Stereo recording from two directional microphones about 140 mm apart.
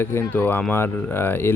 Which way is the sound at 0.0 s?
15° left (ahead or behind).